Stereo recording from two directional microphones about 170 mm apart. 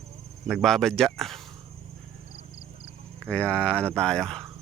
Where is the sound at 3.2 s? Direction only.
5° left (ahead or behind).